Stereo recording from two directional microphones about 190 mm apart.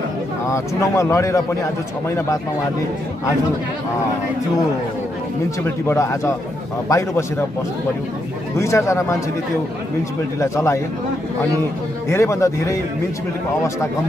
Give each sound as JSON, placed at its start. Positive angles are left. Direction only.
{"t": 0.5, "sound": "a man's voice", "side_deg": 15}
{"t": 5.6, "sound": "a man's voice", "side_deg": 15}
{"t": 8.5, "sound": "a man's voice", "side_deg": 15}
{"t": 10.4, "sound": "a man's voice", "side_deg": 15}
{"t": 12.1, "sound": "a man's voice", "side_deg": 15}